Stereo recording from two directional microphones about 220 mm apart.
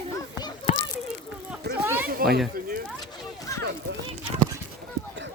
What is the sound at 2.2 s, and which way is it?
Speech, 40° right (ahead or behind).